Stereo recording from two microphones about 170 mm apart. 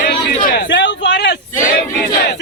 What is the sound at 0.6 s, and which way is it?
Speech, 90° left.